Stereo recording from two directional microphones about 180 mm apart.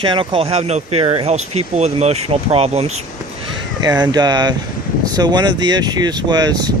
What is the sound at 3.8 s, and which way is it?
Speech, 20° right (ahead or behind).